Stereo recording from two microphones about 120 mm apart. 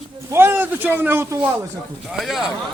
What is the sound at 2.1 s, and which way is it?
Speech, 5° right (ahead or behind).